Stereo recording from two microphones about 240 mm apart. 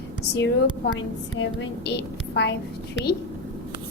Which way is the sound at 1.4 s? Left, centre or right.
Left.